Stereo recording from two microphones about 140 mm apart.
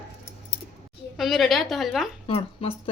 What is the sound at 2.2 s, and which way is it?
Speech, 45° left (ahead or behind).